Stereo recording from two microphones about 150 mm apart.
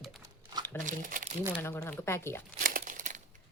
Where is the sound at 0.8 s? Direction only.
60° right (ahead or behind).